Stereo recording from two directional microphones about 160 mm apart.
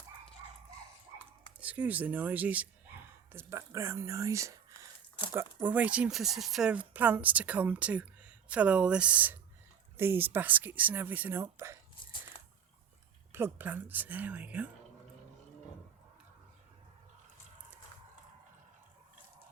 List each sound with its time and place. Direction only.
1.5 s speech: 10° right (ahead or behind)
13.3 s speech: 10° right (ahead or behind)